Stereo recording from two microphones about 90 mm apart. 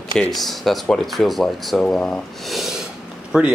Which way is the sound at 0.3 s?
Centre (ahead or behind).